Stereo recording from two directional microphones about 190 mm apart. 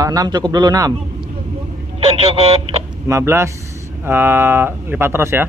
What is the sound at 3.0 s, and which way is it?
Speech, 15° right (ahead or behind).